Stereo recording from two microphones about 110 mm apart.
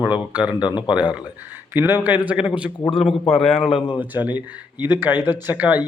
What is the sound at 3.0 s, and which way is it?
Speech, 60° left (ahead or behind).